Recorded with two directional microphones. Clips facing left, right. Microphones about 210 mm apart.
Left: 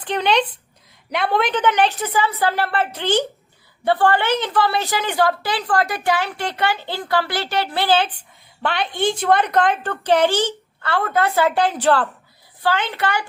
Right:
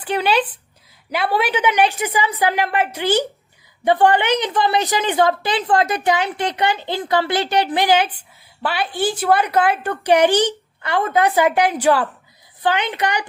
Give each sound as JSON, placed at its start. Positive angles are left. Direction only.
{"t": 0.0, "sound": "a child's voice", "side_deg": -5}